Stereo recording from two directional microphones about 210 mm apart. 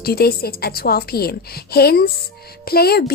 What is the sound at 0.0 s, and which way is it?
Speech, 45° left (ahead or behind).